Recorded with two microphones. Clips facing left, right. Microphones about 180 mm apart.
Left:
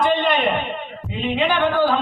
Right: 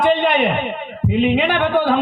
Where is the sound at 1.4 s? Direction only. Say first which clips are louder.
Right 1 dB; 60° right (ahead or behind).